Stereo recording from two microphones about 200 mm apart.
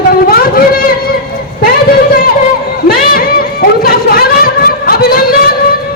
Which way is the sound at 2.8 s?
50° left (ahead or behind).